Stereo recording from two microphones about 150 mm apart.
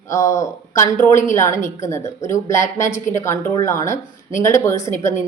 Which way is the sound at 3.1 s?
20° left (ahead or behind).